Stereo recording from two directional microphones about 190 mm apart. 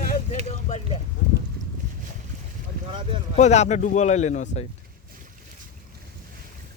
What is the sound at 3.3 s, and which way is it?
Speech, 35° left (ahead or behind).